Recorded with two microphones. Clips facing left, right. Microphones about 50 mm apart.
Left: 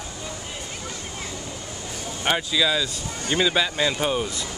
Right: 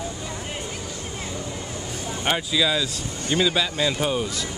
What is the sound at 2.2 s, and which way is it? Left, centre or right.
Speech, centre.